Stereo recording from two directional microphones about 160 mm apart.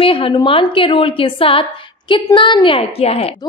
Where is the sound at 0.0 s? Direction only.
35° left (ahead or behind).